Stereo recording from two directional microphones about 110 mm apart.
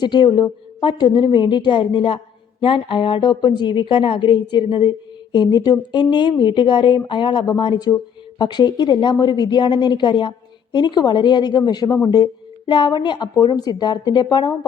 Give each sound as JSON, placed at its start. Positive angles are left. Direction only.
{"t": 0.0, "sound": "a woman's voice", "side_deg": 40}